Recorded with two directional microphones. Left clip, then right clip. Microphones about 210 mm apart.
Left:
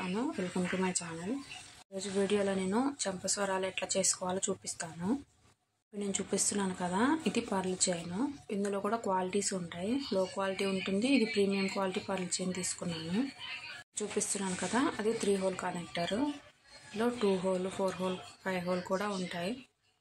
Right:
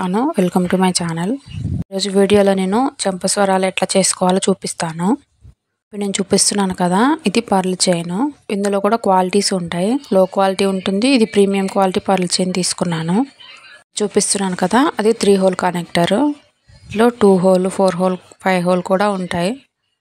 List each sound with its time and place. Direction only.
0.0 s speech: 45° right (ahead or behind)
13.9 s speech: 45° right (ahead or behind)